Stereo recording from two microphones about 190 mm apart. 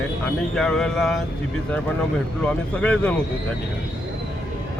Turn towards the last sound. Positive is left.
turn(degrees=5)  # may be behind; listen again after turning